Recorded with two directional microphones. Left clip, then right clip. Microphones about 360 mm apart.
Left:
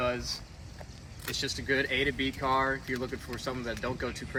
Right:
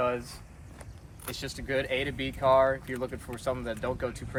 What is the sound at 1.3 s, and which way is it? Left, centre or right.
Speech, right.